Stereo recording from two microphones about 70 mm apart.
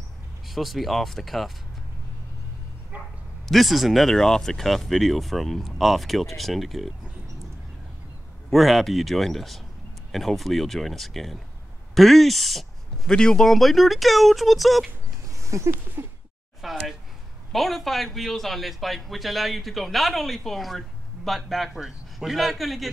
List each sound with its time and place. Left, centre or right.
0.5 s a man's voice: centre
3.4 s a man's voice: centre
8.5 s a man's voice: centre
15.4 s speech: right
16.6 s a sound: centre
17.5 s a man's voice: centre